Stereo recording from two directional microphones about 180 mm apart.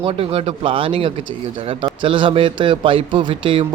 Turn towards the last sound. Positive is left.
turn(degrees=-25)  # may be behind; listen again after turning